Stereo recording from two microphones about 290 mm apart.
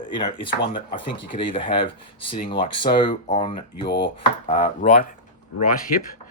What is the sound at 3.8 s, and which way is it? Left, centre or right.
Chopping, left.